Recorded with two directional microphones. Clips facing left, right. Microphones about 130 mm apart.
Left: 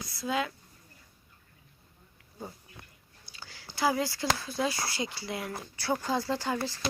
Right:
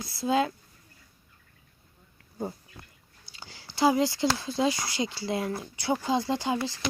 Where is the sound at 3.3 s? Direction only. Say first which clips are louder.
Right 1 dB; 25° right (ahead or behind).